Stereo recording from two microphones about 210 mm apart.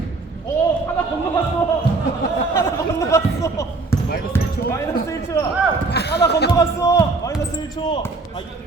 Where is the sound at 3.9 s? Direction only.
10° left (ahead or behind).